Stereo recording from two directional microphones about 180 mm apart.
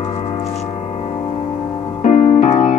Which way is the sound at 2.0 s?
45° left (ahead or behind).